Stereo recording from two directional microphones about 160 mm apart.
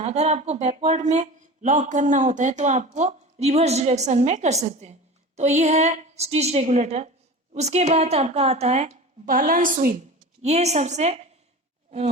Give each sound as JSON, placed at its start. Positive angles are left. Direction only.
{"t": 0.0, "sound": "speech", "side_deg": -45}
{"t": 9.2, "sound": "a woman's voice", "side_deg": -60}
{"t": 10.4, "sound": "speech", "side_deg": -45}